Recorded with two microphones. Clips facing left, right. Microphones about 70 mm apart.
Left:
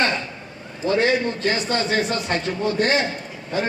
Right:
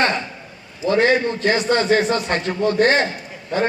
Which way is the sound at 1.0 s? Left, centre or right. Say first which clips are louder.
Right 3 dB; right.